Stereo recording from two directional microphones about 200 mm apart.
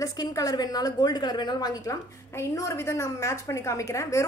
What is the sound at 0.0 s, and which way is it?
A woman's voice, 15° left (ahead or behind).